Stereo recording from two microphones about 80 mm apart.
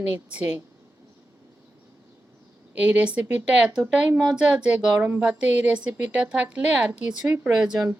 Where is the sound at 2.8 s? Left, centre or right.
Centre.